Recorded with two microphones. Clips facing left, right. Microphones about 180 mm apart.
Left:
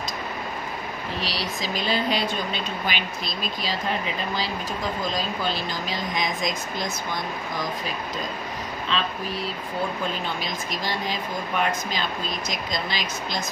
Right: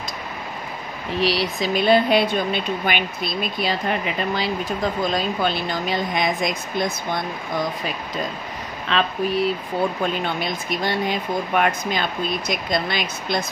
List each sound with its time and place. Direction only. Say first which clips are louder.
1.2 s speech: right 11 dB; 60° right (ahead or behind)
5.1 s speech: right 5 dB; 60° right (ahead or behind)
8.9 s speech: right 6 dB; 65° right (ahead or behind)
10.2 s speech: right 4 dB; 60° right (ahead or behind)